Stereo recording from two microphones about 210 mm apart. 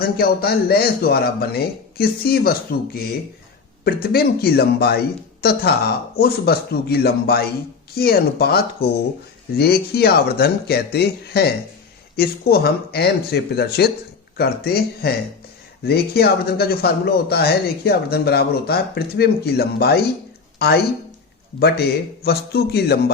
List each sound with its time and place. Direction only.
0.0 s speech: 45° left (ahead or behind)